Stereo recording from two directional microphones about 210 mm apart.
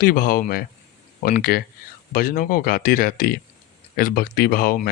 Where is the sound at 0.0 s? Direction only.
45° left (ahead or behind).